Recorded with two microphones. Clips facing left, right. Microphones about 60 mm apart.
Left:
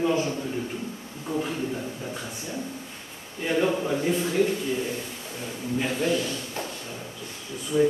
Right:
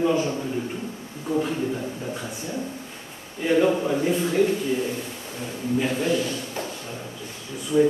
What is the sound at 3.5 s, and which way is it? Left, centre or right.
A man's voice, centre.